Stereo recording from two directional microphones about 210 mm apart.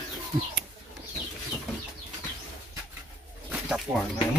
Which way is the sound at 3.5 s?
Centre (ahead or behind).